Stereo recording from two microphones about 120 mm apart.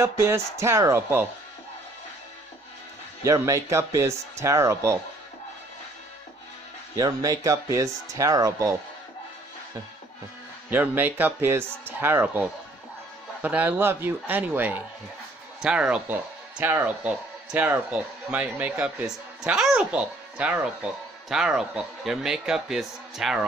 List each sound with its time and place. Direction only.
0.0 s speech: 20° right (ahead or behind)
3.3 s speech: 25° right (ahead or behind)
7.0 s speech: 30° right (ahead or behind)
10.7 s speech: 15° right (ahead or behind)